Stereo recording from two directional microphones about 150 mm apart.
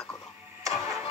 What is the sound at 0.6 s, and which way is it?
Vehicle, 20° right (ahead or behind).